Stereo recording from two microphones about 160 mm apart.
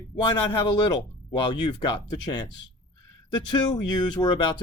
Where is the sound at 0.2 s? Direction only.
30° left (ahead or behind).